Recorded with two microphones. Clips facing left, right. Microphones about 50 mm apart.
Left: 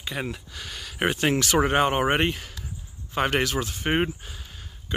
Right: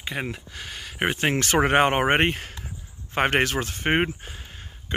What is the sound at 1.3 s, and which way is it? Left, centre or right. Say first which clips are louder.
Speech: right 4 dB; right.